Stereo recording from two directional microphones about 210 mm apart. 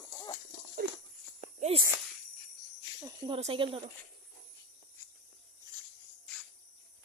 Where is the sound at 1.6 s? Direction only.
30° right (ahead or behind).